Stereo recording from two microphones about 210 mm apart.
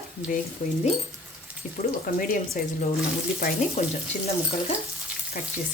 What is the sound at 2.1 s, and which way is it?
Speech, 40° left (ahead or behind).